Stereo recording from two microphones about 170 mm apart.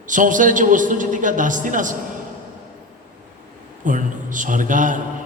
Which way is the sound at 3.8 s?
50° right (ahead or behind).